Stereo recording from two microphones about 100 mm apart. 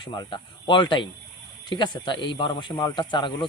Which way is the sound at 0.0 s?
50° left (ahead or behind).